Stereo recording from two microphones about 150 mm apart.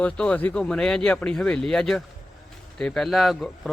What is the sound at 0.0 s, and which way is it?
Speech, 5° left (ahead or behind).